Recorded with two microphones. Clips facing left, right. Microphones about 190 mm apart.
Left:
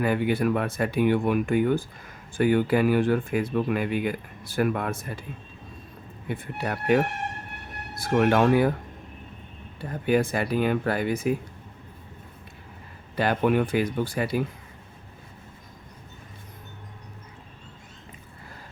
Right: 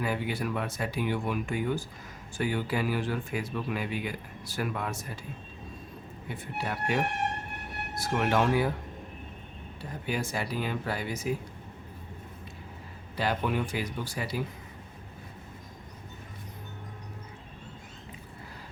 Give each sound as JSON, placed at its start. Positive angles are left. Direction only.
{"t": 0.0, "sound": "speech", "side_deg": 55}
{"t": 6.2, "sound": "speech", "side_deg": 55}
{"t": 10.1, "sound": "speech", "side_deg": 55}
{"t": 13.1, "sound": "speech", "side_deg": 55}